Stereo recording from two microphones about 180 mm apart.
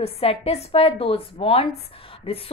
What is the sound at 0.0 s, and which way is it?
A woman's voice, 35° left (ahead or behind).